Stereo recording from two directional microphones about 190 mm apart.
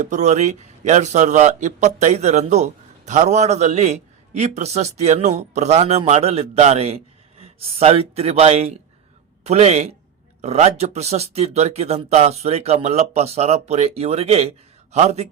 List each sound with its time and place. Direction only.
0.0 s a man's voice: 40° right (ahead or behind)